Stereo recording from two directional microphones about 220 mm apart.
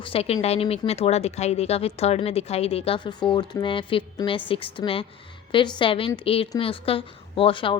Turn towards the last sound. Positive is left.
turn(degrees=25)  # may be behind; listen again after turning